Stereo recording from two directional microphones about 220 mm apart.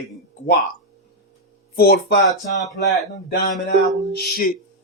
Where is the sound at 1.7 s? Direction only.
45° left (ahead or behind).